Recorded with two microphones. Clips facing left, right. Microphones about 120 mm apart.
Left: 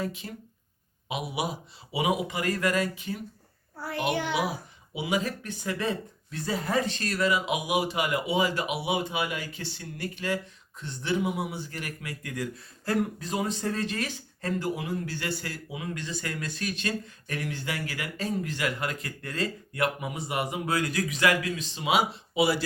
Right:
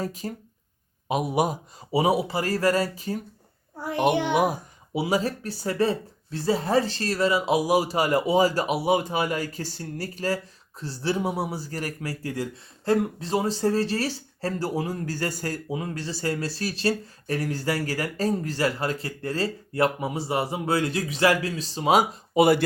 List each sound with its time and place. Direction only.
0.0 s speech: 40° right (ahead or behind)
3.8 s a child's voice: 20° right (ahead or behind)
4.9 s speech: 35° right (ahead or behind); by 22.6 s 50° right (ahead or behind)